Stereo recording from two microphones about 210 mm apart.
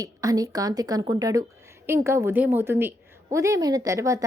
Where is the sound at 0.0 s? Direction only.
15° right (ahead or behind).